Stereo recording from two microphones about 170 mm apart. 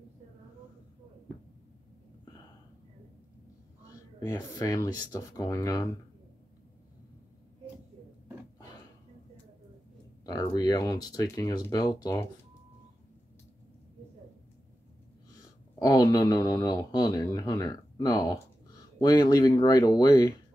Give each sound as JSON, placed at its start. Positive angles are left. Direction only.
{"t": 4.2, "sound": "speech", "side_deg": 20}
{"t": 10.2, "sound": "speech", "side_deg": 20}
{"t": 15.8, "sound": "speech", "side_deg": 20}